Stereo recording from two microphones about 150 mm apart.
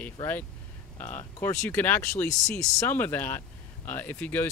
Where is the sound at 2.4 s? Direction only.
5° left (ahead or behind).